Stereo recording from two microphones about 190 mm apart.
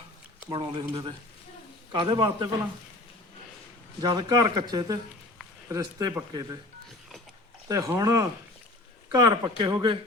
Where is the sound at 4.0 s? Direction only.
20° right (ahead or behind).